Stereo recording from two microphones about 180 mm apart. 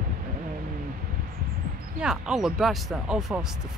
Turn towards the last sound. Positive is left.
turn(degrees=-5)  # may be behind; listen again after turning